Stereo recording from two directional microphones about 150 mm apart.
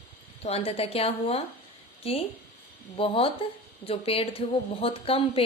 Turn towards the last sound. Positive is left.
turn(degrees=40)  # may be behind; listen again after turning